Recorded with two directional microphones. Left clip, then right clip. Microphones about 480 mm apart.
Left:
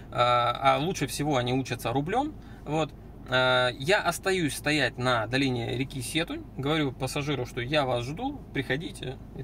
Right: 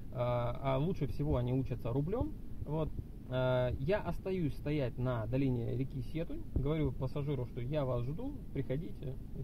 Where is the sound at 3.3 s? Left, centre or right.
Centre.